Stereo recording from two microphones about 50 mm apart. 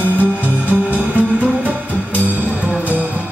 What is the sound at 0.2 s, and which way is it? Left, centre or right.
Music, right.